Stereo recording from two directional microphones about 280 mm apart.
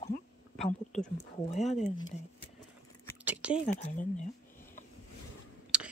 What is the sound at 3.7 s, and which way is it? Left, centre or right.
Speech, left.